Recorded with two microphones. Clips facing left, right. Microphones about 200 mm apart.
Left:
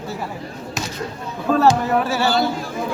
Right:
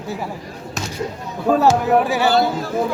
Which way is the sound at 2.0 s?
15° right (ahead or behind).